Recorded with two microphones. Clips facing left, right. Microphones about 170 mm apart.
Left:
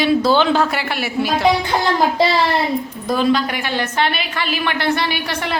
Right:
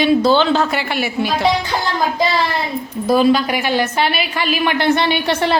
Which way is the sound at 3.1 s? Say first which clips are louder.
Right 4 dB; 10° right (ahead or behind).